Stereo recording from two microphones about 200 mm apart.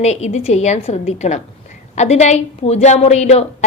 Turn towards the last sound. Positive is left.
turn(degrees=35)  # may be behind; listen again after turning